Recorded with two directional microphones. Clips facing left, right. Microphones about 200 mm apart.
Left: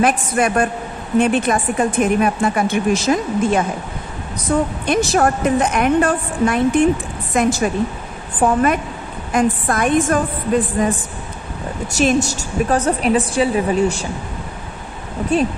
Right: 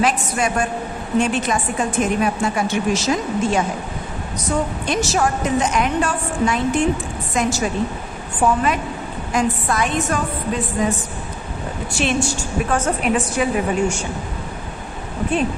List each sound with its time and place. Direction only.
0.0 s a woman's voice: 50° left (ahead or behind)
9.3 s a woman's voice: 55° left (ahead or behind); by 14.0 s 35° left (ahead or behind)
15.3 s a woman's voice: 40° left (ahead or behind)